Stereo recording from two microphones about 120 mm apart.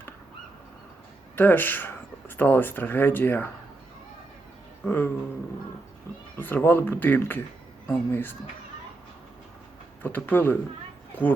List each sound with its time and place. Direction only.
1.4 s speech: 15° left (ahead or behind)
4.9 s speech: 15° left (ahead or behind)
6.3 s speech: 20° left (ahead or behind)
10.0 s speech: 15° left (ahead or behind)